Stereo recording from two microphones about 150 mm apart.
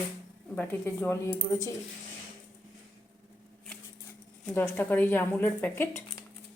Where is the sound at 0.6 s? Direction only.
15° left (ahead or behind).